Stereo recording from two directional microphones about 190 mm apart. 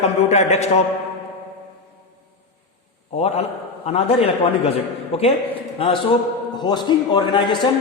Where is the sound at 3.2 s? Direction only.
35° left (ahead or behind).